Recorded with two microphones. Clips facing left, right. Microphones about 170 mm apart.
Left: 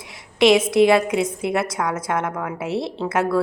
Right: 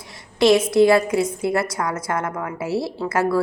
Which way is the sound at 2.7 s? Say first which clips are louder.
Right 2 dB; 20° left (ahead or behind).